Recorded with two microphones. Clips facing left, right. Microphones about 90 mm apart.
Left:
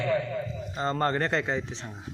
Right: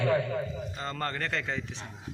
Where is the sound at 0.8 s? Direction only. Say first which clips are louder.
Left 8 dB; 30° left (ahead or behind).